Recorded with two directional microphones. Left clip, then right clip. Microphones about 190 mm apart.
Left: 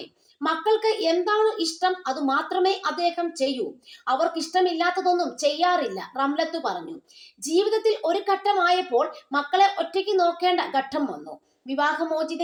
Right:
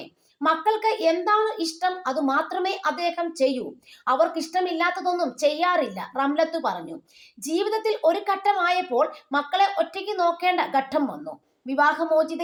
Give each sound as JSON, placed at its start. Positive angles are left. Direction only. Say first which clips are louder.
{"t": 0.4, "sound": "a woman's voice", "louder": "right 1 dB", "side_deg": -25}